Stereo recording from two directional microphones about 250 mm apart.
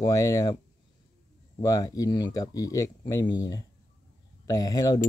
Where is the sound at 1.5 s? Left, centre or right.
Centre.